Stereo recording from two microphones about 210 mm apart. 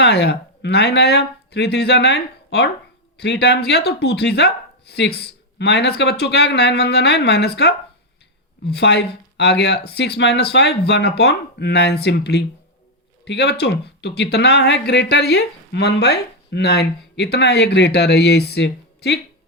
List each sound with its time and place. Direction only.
0.0 s speech: 50° left (ahead or behind)